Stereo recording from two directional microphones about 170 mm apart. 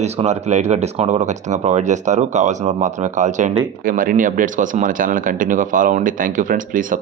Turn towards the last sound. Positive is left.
turn(degrees=-50)  # may be behind; listen again after turning